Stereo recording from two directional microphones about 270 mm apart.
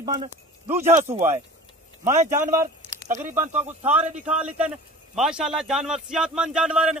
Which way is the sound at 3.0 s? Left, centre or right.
Right.